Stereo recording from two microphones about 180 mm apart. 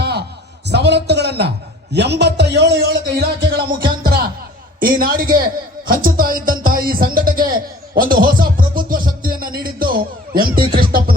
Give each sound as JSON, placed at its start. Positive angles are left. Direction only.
{"t": 0.0, "sound": "a sound", "side_deg": -65}
{"t": 0.7, "sound": "a man's voice", "side_deg": -70}
{"t": 7.9, "sound": "music", "side_deg": -50}